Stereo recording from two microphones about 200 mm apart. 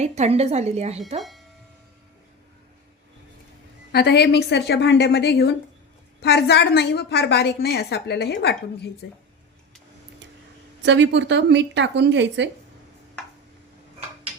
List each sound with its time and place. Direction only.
0.0 s speech: 30° right (ahead or behind)
1.2 s music: centre (ahead or behind)
3.9 s a woman's voice: 55° left (ahead or behind)
10.8 s a woman's voice: 65° right (ahead or behind)